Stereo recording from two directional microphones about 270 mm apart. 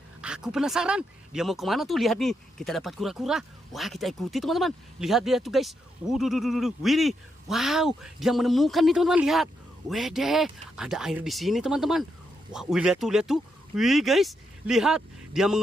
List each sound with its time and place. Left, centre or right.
0.2 s speech: centre